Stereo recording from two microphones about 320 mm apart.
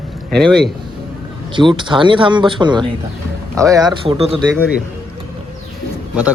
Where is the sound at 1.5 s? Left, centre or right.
Centre.